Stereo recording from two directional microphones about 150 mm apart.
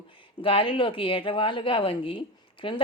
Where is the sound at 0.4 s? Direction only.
35° left (ahead or behind).